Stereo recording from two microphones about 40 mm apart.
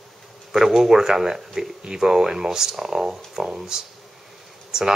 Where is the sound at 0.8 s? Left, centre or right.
Centre.